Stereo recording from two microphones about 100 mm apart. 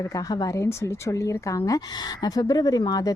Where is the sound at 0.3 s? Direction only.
40° left (ahead or behind).